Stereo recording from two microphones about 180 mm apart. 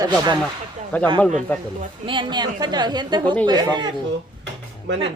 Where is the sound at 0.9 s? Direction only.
10° left (ahead or behind).